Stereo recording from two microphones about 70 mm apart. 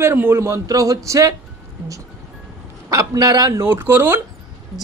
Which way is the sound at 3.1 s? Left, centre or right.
Right.